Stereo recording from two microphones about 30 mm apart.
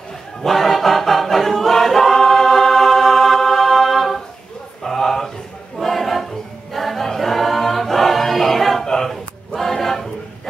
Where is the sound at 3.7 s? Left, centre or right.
Centre.